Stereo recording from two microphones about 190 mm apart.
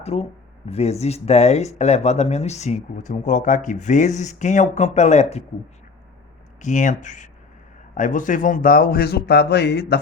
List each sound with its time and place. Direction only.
0.0 s speech: 35° left (ahead or behind)
6.6 s a man's voice: 40° left (ahead or behind); by 10.0 s 60° left (ahead or behind)